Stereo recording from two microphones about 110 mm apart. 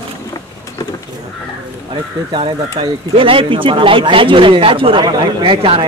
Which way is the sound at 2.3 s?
50° right (ahead or behind).